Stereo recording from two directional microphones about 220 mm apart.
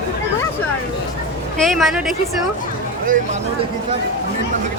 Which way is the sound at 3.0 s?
35° right (ahead or behind).